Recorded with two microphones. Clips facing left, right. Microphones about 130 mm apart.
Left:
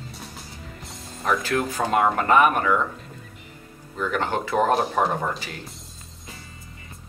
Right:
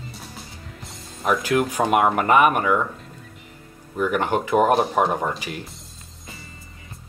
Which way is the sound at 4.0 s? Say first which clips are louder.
Right 4 dB; 15° right (ahead or behind).